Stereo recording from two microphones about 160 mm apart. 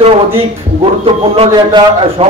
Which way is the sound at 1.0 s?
35° right (ahead or behind).